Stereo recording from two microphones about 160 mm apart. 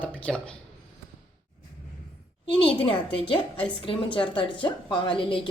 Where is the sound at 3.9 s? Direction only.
35° left (ahead or behind).